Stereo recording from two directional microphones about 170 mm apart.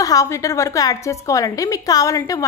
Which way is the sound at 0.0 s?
20° left (ahead or behind).